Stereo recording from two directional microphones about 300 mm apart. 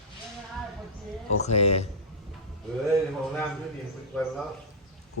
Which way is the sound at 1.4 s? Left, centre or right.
Left.